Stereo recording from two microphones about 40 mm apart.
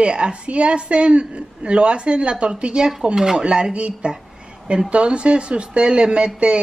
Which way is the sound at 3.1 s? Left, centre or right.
Centre.